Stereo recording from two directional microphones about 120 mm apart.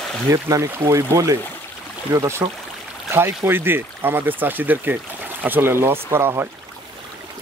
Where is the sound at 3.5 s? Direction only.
20° right (ahead or behind).